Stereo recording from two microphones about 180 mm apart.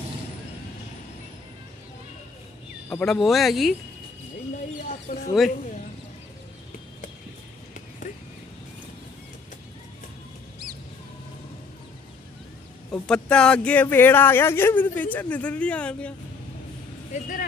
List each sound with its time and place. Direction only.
2.9 s speech: 5° left (ahead or behind)
4.8 s speech: 50° left (ahead or behind)
13.0 s speech: 5° left (ahead or behind)
17.1 s speech: 50° left (ahead or behind)